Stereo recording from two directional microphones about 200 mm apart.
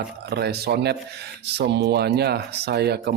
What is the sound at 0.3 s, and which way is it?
Speech, 55° right (ahead or behind).